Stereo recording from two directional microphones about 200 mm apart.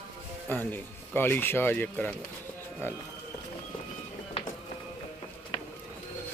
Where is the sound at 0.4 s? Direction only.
10° left (ahead or behind).